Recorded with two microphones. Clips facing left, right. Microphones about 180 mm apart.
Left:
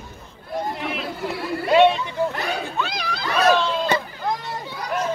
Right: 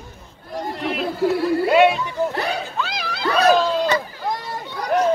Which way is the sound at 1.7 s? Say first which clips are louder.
Left 2 dB; 5° right (ahead or behind).